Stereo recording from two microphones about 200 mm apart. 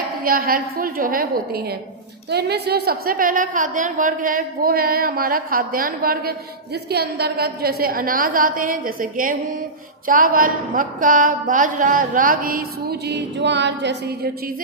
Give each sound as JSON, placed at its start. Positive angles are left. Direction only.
{"t": 0.3, "sound": "speech", "side_deg": -45}